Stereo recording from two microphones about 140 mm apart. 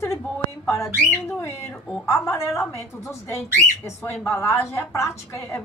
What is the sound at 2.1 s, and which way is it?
A woman's voice, 20° left (ahead or behind).